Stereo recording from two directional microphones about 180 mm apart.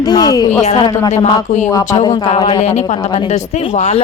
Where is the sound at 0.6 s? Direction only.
40° left (ahead or behind).